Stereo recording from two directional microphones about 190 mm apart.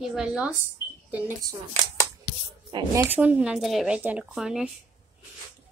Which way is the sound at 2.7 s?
25° right (ahead or behind).